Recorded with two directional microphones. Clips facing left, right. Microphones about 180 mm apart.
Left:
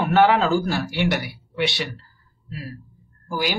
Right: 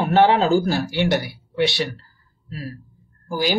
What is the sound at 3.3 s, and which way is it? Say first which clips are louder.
Speech: right 3 dB; 30° right (ahead or behind).